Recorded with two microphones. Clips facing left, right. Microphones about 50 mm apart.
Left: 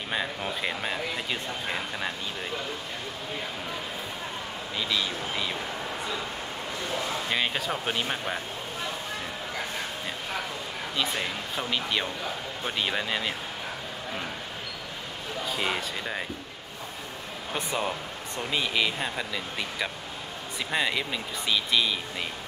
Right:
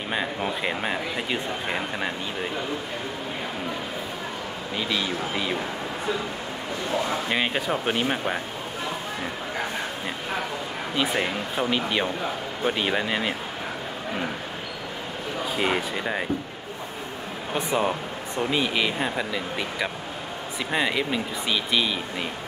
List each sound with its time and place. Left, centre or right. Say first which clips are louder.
0.1 s speech: right 3 dB; centre
4.7 s speech: right 3 dB; centre
7.2 s speech: right 3 dB; centre
11.0 s speech: right 5 dB; centre
15.5 s speech: right 5 dB; centre
17.6 s speech: right 6 dB; centre